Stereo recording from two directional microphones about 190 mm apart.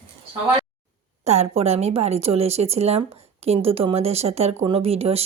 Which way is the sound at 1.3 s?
35° right (ahead or behind).